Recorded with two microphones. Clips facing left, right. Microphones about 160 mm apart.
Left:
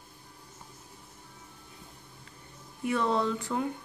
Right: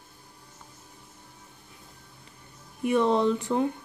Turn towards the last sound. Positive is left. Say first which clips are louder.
# right 5 dB
turn(degrees=-20)  # may be behind; listen again after turning